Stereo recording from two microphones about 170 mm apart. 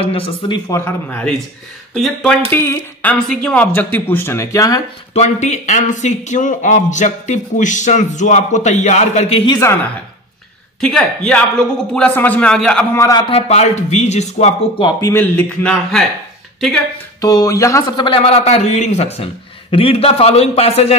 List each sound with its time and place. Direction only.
0.0 s a man's voice: 35° left (ahead or behind)
0.7 s a man's voice: 15° left (ahead or behind)
2.5 s speech: 15° left (ahead or behind)
5.1 s a man's voice: 40° left (ahead or behind)
10.8 s a man's voice: 5° left (ahead or behind)
13.3 s a man's voice: 40° left (ahead or behind)
14.9 s speech: 20° left (ahead or behind)
17.2 s a man's voice: 20° left (ahead or behind); by 20.9 s 35° left (ahead or behind)